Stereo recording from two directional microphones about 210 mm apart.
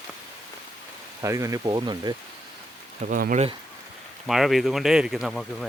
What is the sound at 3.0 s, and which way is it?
Speech, 40° right (ahead or behind).